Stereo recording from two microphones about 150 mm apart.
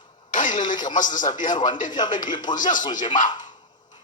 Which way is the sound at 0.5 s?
30° left (ahead or behind).